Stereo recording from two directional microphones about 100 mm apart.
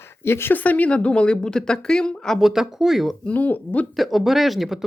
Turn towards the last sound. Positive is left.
turn(degrees=0)  # may be behind; listen again after turning